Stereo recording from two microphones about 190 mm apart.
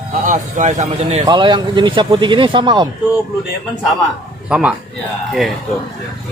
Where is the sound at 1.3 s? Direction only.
25° right (ahead or behind).